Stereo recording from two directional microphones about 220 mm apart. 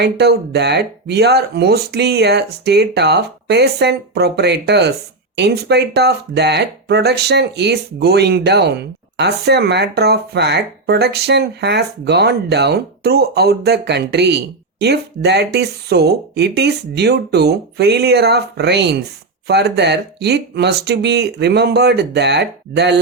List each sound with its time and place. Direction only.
0.0 s speech: 50° right (ahead or behind)